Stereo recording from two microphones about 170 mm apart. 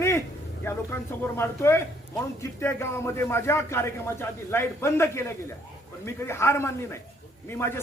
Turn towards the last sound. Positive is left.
turn(degrees=15)  # may be behind; listen again after turning